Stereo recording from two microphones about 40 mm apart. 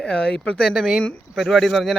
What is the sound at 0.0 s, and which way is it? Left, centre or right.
Speech, left.